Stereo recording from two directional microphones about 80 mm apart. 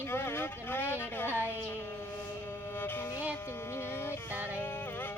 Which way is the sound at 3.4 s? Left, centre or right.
Left.